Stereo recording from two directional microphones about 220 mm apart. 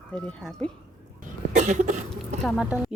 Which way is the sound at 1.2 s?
35° right (ahead or behind).